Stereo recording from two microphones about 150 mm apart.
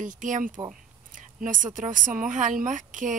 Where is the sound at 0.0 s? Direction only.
60° right (ahead or behind).